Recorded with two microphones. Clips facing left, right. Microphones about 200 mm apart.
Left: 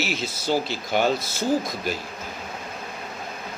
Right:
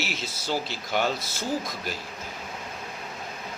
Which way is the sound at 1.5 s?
15° left (ahead or behind).